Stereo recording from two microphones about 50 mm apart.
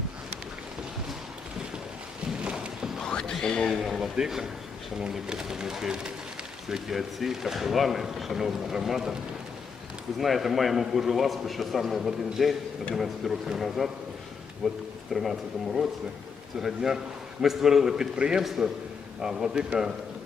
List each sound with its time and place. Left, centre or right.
2.4 s a sound: centre
3.0 s a sound: centre
3.3 s speech: centre
3.8 s speech: centre
10.2 s speech: centre
18.4 s speech: centre